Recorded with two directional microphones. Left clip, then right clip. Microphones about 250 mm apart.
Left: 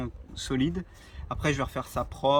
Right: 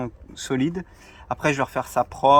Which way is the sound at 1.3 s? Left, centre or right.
Centre.